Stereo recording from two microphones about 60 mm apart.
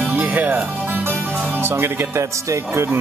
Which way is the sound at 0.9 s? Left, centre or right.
Right.